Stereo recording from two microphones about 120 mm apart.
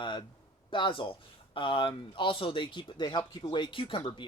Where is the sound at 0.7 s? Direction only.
45° left (ahead or behind).